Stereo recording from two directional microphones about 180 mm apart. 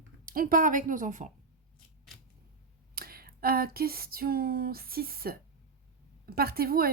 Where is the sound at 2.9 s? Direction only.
55° right (ahead or behind).